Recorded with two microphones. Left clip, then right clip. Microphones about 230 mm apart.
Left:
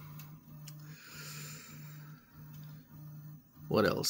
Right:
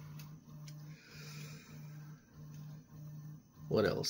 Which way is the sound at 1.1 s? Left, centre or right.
Left.